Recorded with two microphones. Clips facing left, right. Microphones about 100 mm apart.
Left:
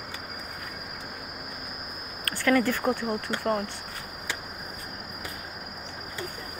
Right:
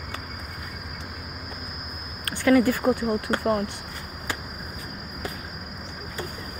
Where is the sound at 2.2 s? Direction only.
15° right (ahead or behind).